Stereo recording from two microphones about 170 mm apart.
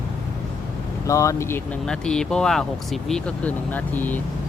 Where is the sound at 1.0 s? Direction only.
20° left (ahead or behind).